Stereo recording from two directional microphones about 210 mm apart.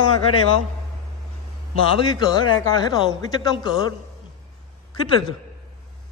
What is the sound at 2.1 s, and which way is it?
Speech, 20° left (ahead or behind).